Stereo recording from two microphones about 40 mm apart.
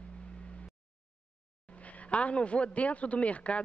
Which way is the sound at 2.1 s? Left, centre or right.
Left.